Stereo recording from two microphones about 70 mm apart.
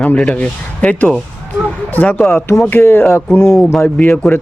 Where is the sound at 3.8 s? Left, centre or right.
Left.